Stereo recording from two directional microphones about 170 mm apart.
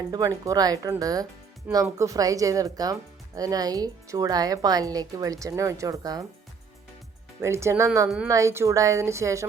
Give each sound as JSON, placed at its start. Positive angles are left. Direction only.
{"t": 0.1, "sound": "speech", "side_deg": -20}
{"t": 7.4, "sound": "a woman's voice", "side_deg": -15}